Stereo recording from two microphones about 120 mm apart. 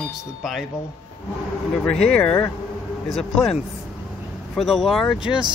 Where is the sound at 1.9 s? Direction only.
5° left (ahead or behind).